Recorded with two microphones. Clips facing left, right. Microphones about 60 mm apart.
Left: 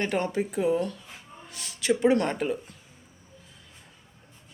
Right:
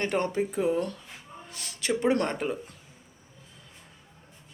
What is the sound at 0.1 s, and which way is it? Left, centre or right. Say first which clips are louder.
Speech: even; right.